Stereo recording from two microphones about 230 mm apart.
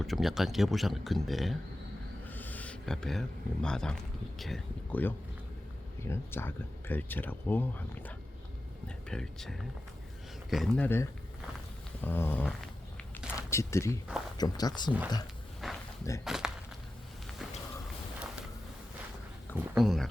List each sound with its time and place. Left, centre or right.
0.0 s speech: centre
2.2 s a sound: centre
4.4 s speech: centre
15.6 s a sound: centre
16.2 s speech: centre
19.5 s speech: centre